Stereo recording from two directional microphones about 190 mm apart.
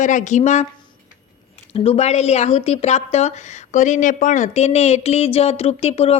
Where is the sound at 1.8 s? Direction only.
35° left (ahead or behind).